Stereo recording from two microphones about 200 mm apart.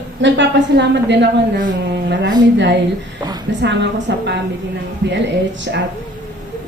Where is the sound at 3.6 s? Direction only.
60° right (ahead or behind).